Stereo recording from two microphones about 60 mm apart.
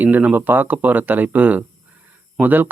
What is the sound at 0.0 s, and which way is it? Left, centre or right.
Speech, right.